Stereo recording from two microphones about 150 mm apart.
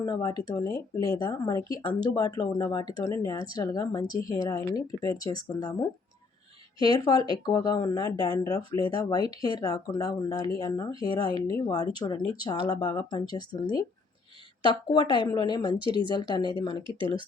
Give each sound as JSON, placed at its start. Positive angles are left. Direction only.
{"t": 0.0, "sound": "speech", "side_deg": 25}
{"t": 7.0, "sound": "speech", "side_deg": 25}
{"t": 14.9, "sound": "speech", "side_deg": 30}
{"t": 15.8, "sound": "speech", "side_deg": -35}
{"t": 16.1, "sound": "speech", "side_deg": 30}